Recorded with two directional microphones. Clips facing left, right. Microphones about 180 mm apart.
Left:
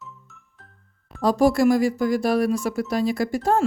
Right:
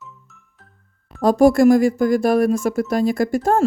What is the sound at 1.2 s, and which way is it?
Speech, 50° right (ahead or behind).